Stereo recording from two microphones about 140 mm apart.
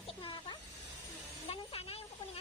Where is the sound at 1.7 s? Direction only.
40° left (ahead or behind).